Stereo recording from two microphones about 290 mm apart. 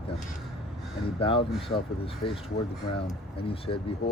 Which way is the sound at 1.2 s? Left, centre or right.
Centre.